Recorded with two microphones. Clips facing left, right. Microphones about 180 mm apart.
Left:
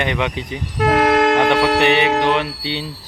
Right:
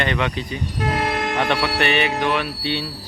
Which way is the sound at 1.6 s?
90° left.